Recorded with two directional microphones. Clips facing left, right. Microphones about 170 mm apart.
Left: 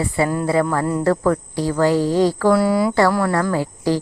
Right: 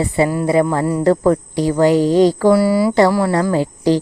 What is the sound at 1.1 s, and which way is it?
Speech, 20° right (ahead or behind).